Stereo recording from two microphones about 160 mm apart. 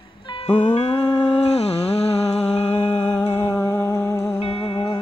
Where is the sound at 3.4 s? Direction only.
10° left (ahead or behind).